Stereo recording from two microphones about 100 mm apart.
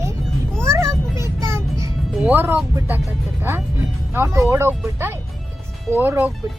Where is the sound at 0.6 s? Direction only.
30° right (ahead or behind).